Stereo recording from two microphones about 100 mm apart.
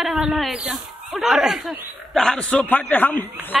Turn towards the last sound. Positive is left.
turn(degrees=20)  # may be behind; listen again after turning